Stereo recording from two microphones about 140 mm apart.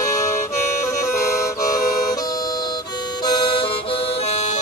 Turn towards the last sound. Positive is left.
turn(degrees=35)  # may be behind; listen again after turning